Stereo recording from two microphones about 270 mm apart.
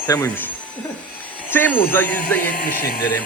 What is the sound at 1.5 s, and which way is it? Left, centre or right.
Speech, centre.